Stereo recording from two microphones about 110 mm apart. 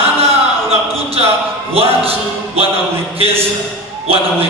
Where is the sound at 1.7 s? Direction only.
60° right (ahead or behind).